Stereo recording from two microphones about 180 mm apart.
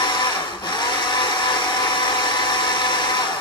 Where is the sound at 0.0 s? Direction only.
25° left (ahead or behind).